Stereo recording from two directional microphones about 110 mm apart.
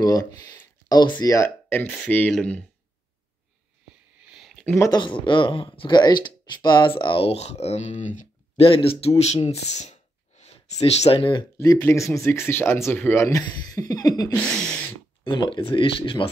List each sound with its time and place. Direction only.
0.0 s speech: 30° left (ahead or behind)
1.3 s speech: 20° left (ahead or behind)
4.4 s a sound: centre (ahead or behind)
4.9 s speech: 45° left (ahead or behind)
7.2 s speech: 75° left (ahead or behind)
8.5 s speech: 55° left (ahead or behind)
11.5 s speech: 30° left (ahead or behind)
13.4 s a sound: 35° left (ahead or behind)
14.4 s speech: 10° left (ahead or behind)
15.2 s speech: 45° left (ahead or behind)